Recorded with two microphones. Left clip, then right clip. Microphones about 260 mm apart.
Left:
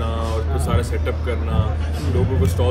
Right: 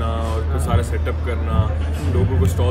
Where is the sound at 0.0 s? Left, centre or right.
Centre.